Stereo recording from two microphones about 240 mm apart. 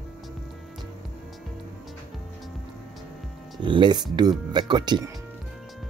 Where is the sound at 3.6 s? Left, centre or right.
Centre.